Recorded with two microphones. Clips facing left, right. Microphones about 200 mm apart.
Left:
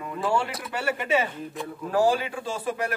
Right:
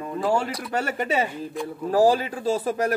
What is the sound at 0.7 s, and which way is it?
A man's voice, 40° right (ahead or behind).